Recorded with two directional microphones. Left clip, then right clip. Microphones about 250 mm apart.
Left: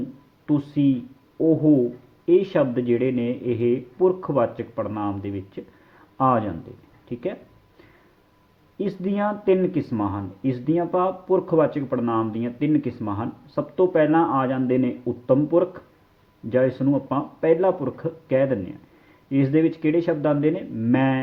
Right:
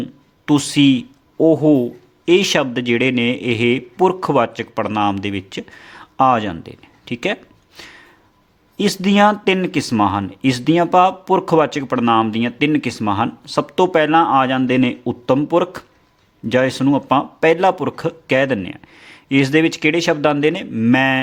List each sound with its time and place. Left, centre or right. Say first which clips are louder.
0.4 s speech: right 8 dB; right
2.2 s speech: right 4 dB; right
8.8 s speech: right 11 dB; right